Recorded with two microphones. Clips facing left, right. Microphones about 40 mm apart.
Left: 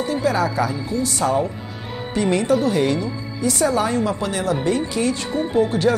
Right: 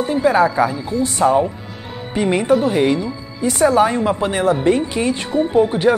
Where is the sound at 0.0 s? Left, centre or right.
Right.